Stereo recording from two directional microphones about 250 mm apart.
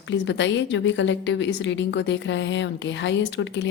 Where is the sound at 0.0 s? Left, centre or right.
Left.